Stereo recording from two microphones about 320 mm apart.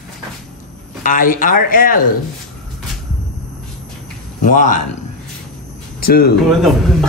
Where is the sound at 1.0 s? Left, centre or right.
Left.